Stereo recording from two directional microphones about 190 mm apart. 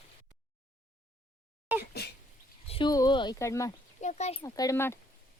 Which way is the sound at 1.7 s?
5° right (ahead or behind).